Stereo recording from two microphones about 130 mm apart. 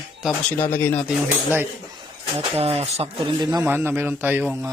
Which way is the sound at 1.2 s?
15° right (ahead or behind).